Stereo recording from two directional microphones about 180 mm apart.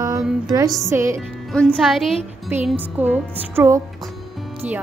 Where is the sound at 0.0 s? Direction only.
20° right (ahead or behind).